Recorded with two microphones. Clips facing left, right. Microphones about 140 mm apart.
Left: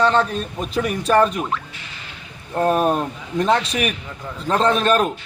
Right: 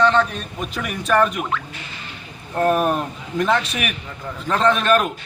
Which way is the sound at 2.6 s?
25° left (ahead or behind).